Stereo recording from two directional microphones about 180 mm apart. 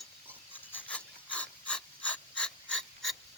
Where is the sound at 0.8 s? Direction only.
5° left (ahead or behind).